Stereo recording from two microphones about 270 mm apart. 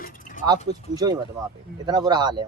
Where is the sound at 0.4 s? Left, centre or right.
Centre.